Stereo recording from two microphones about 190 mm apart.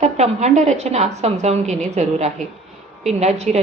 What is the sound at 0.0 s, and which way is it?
A woman's voice, 35° right (ahead or behind).